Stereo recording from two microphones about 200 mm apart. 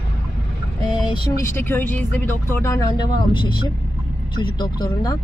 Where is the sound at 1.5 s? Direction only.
10° left (ahead or behind).